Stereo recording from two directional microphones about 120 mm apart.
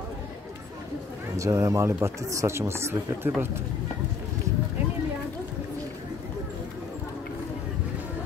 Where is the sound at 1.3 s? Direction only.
25° right (ahead or behind).